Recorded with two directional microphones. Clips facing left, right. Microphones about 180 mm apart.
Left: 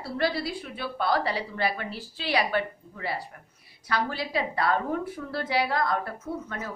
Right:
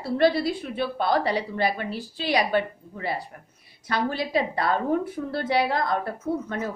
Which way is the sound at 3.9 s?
20° right (ahead or behind).